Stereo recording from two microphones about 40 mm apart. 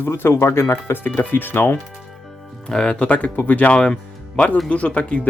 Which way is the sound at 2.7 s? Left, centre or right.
Centre.